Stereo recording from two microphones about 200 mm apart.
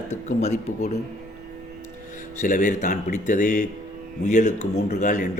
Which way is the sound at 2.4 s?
40° left (ahead or behind).